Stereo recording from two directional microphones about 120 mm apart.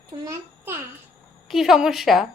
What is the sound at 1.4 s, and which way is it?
Speech, 5° right (ahead or behind).